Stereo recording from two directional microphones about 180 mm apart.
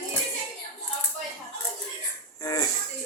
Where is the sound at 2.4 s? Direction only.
20° left (ahead or behind).